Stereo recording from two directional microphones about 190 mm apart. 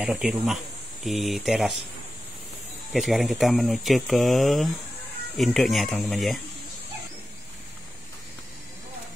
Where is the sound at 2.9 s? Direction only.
Centre (ahead or behind).